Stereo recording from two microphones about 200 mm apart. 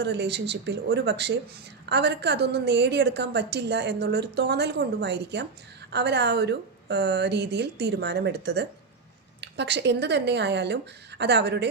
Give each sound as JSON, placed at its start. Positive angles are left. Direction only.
{"t": 0.0, "sound": "a woman's voice", "side_deg": -55}